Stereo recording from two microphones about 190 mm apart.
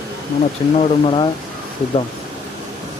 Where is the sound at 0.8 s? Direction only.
30° left (ahead or behind).